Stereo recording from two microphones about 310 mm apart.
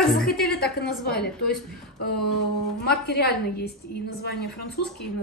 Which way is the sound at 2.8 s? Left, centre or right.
Left.